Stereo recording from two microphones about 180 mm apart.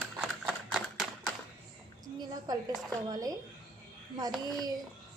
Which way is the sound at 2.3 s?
20° right (ahead or behind).